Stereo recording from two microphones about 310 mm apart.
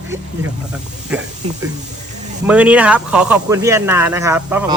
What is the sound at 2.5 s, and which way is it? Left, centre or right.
Speech, centre.